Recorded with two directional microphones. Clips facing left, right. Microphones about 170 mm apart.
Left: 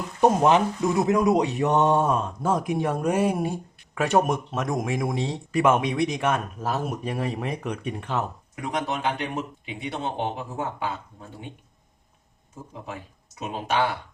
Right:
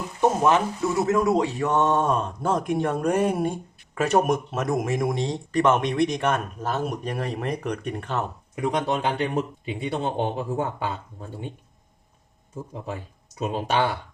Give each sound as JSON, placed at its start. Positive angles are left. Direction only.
{"t": 0.2, "sound": "speech", "side_deg": 15}
{"t": 8.7, "sound": "speech", "side_deg": -30}